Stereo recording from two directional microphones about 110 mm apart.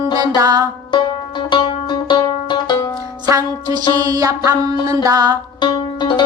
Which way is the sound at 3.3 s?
35° right (ahead or behind).